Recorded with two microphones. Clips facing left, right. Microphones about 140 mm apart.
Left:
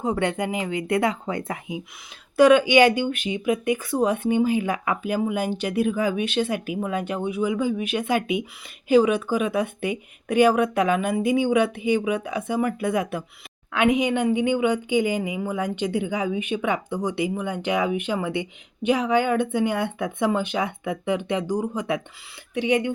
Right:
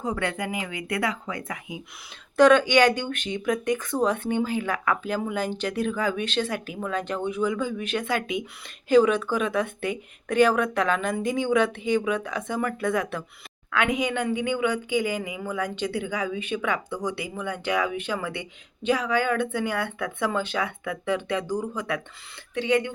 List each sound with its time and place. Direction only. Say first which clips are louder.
0.0 s speech: left 4 dB; 25° left (ahead or behind)
2.3 s speech: left 2 dB; 10° left (ahead or behind)